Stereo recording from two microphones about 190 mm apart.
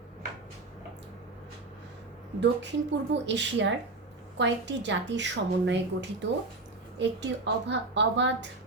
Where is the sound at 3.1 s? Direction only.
70° right (ahead or behind).